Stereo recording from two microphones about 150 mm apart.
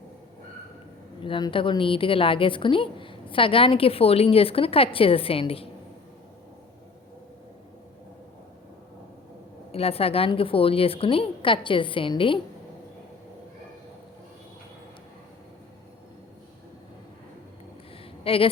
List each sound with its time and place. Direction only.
1.2 s a woman's voice: 35° left (ahead or behind)
9.7 s a woman's voice: 40° left (ahead or behind)
18.2 s a sound: 40° left (ahead or behind)